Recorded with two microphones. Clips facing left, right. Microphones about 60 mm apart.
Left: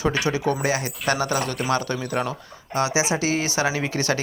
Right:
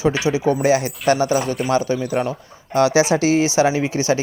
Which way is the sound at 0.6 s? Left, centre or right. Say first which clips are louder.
Right 7 dB; left.